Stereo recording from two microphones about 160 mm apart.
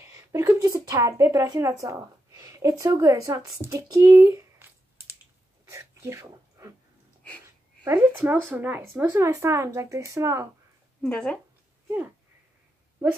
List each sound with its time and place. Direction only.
0.1 s a woman's voice: 20° right (ahead or behind)
5.7 s a sound: 20° right (ahead or behind)
7.4 s speech: 20° right (ahead or behind)
11.0 s speech: 10° left (ahead or behind)